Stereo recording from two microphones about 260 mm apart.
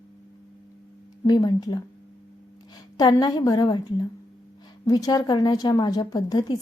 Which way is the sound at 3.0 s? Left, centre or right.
Centre.